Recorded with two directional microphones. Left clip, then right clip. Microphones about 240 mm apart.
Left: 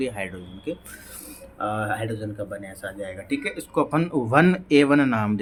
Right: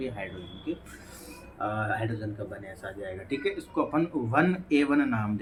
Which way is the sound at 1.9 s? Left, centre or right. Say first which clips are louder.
Left 3 dB; left.